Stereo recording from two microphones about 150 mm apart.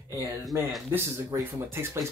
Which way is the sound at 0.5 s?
20° right (ahead or behind).